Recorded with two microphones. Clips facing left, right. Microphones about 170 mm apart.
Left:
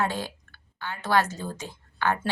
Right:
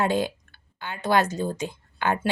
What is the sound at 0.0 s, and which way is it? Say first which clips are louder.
Speech: right 5 dB; 15° right (ahead or behind).